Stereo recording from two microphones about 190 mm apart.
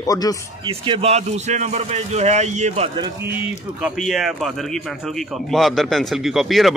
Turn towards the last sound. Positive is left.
turn(degrees=0)  # may be behind; listen again after turning